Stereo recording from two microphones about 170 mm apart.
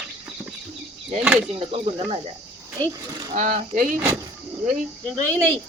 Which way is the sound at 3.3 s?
45° right (ahead or behind).